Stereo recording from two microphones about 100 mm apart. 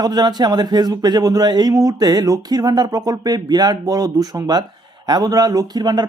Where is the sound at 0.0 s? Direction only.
40° right (ahead or behind).